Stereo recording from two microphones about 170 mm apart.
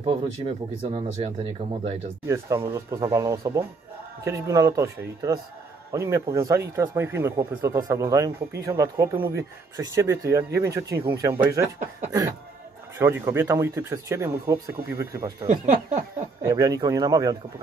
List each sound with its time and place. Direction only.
0.9 s speech: 35° right (ahead or behind)
2.2 s speech: 15° right (ahead or behind)
15.4 s speech: 45° right (ahead or behind)
16.4 s speech: 20° right (ahead or behind)